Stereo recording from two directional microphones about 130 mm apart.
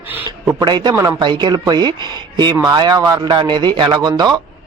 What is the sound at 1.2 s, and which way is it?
Speech, 35° right (ahead or behind).